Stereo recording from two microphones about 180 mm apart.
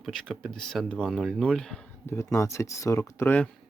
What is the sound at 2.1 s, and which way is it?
Speech, 15° left (ahead or behind).